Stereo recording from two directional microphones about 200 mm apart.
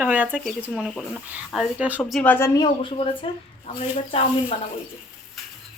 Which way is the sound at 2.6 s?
25° left (ahead or behind).